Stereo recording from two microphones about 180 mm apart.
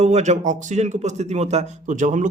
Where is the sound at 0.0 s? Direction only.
40° right (ahead or behind).